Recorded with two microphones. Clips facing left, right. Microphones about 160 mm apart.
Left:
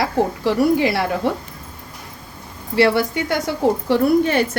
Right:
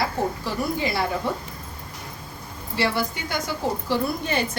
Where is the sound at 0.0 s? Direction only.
75° left (ahead or behind).